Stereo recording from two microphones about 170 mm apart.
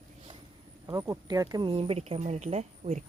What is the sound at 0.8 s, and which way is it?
Speech, 20° right (ahead or behind).